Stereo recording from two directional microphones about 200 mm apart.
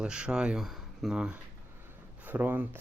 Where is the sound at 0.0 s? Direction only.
5° right (ahead or behind).